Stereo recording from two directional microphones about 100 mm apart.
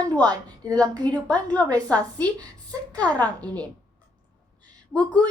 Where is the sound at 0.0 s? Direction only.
40° right (ahead or behind).